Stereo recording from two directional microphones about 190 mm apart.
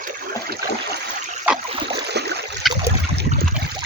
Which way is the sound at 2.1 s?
60° right (ahead or behind).